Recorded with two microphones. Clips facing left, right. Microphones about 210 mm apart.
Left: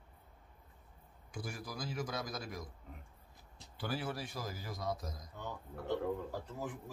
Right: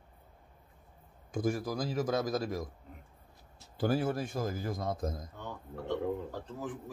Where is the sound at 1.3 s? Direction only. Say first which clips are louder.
Right 12 dB; 45° right (ahead or behind).